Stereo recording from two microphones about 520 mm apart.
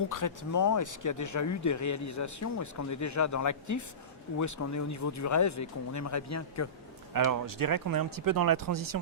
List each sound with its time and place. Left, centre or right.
0.1 s speech: left
7.1 s speech: right